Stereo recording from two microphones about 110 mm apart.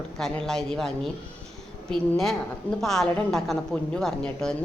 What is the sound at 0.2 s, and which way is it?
A woman's voice, 5° left (ahead or behind).